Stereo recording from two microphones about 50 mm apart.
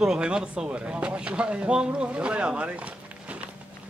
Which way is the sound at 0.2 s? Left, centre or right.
Centre.